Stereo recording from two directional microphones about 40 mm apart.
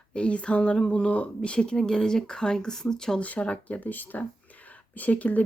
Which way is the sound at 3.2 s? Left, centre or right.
Left.